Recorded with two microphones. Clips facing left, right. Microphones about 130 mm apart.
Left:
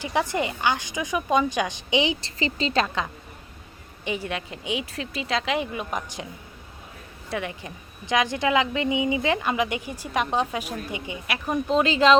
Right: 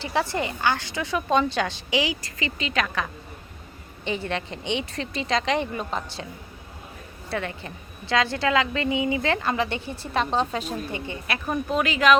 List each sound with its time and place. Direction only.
0.0 s a woman's voice: 15° left (ahead or behind)
4.0 s a woman's voice: 10° left (ahead or behind)
7.3 s a woman's voice: 15° left (ahead or behind)